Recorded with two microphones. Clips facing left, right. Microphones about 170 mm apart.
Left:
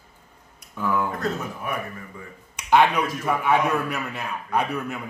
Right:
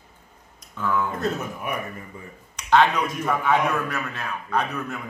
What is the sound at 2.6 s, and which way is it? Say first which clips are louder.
A man's voice: even; 10° left (ahead or behind).